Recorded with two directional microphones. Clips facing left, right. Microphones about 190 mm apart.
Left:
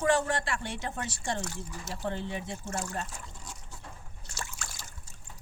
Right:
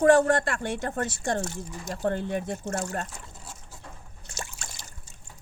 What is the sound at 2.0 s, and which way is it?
Speech, 50° right (ahead or behind).